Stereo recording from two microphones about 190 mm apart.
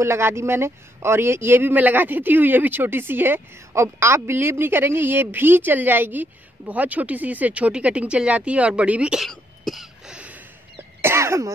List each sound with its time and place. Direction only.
0.0 s a man's voice: 15° right (ahead or behind)